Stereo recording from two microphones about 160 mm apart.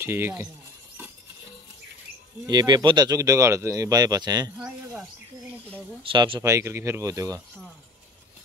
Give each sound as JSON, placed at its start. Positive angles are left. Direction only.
{"t": 0.0, "sound": "speech", "side_deg": -15}
{"t": 2.4, "sound": "speech", "side_deg": -25}
{"t": 4.6, "sound": "speech", "side_deg": -5}
{"t": 6.0, "sound": "speech", "side_deg": -30}
{"t": 6.5, "sound": "speech", "side_deg": -15}